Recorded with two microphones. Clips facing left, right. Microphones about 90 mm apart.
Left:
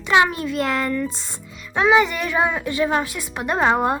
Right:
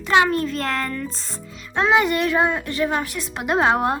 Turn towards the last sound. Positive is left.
turn(degrees=-5)  # may be behind; listen again after turning